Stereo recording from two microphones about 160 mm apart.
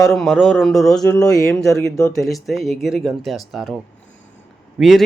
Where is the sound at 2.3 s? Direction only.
Centre (ahead or behind).